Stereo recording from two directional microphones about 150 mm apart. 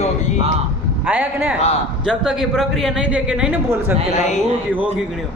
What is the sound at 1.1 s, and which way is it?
A woman's voice, 10° right (ahead or behind).